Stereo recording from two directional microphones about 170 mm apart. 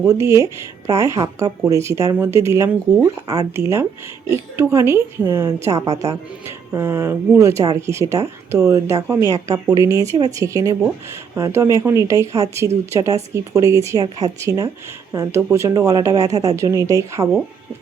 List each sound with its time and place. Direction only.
0.0 s speech: 15° right (ahead or behind)